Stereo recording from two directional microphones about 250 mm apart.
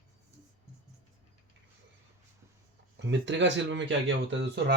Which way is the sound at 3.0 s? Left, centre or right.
Right.